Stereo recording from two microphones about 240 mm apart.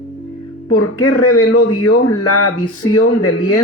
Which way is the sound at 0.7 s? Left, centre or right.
Left.